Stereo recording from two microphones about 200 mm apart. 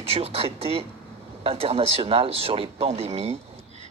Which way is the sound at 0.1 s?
30° right (ahead or behind).